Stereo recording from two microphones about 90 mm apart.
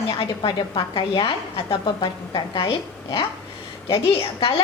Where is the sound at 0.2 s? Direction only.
70° left (ahead or behind).